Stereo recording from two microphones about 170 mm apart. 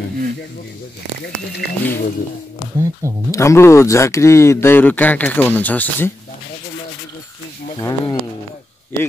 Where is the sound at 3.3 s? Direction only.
15° left (ahead or behind).